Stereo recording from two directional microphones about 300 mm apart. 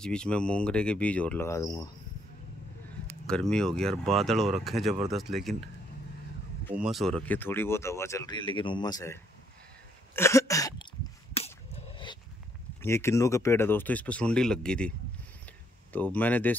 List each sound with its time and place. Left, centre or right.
0.0 s speech: centre
3.3 s speech: centre
6.7 s speech: centre
10.1 s throat clearing: centre
11.3 s a sound: centre
12.8 s speech: centre